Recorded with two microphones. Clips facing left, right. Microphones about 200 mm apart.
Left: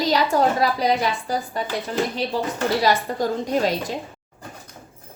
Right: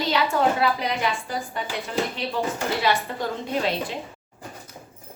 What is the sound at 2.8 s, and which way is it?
Speech, 40° left (ahead or behind).